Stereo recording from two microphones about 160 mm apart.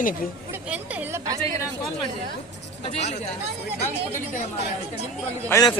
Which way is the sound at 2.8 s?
40° left (ahead or behind).